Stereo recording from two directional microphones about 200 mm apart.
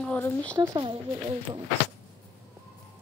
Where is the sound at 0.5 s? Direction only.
25° right (ahead or behind).